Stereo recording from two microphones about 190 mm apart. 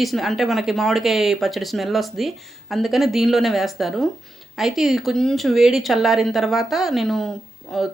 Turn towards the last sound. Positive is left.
turn(degrees=0)  # may be behind; listen again after turning